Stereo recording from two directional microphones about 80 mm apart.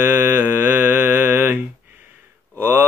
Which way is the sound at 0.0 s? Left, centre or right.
Right.